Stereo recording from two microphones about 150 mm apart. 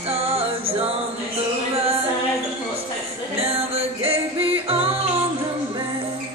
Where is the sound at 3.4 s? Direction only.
40° right (ahead or behind).